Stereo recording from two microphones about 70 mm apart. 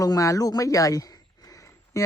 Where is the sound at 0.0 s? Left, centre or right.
Left.